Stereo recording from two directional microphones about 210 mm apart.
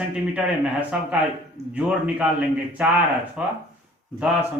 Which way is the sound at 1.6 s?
30° right (ahead or behind).